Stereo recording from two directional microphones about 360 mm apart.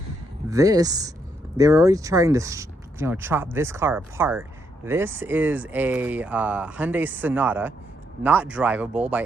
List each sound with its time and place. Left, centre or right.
0.5 s speech: centre